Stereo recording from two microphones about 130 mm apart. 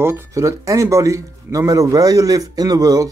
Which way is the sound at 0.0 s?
20° right (ahead or behind).